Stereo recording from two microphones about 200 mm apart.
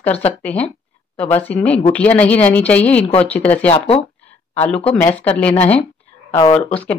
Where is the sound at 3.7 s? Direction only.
25° left (ahead or behind).